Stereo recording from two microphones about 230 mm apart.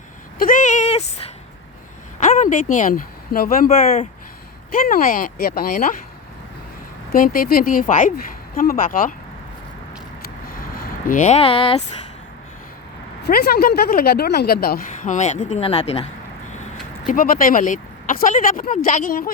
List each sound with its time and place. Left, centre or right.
0.3 s a sound: left
2.2 s speech: left
7.1 s speech: left
10.6 s speech: left
13.2 s speech: left
17.1 s speech: left